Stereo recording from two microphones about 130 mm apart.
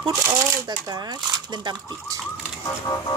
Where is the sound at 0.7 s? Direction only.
30° right (ahead or behind).